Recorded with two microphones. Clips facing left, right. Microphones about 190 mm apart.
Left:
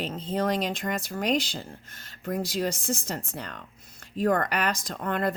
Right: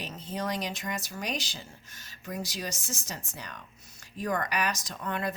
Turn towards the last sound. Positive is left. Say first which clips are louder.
# left 5 dB
turn(degrees=55)  # may be behind; listen again after turning